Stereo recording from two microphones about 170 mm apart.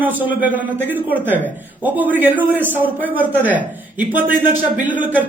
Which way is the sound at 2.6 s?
10° right (ahead or behind).